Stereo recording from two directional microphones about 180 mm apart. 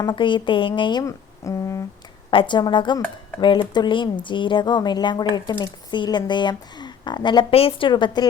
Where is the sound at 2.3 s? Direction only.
25° left (ahead or behind).